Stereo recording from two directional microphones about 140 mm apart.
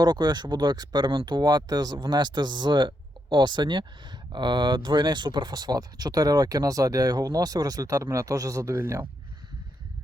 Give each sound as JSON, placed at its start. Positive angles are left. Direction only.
{"t": 0.0, "sound": "speech", "side_deg": -30}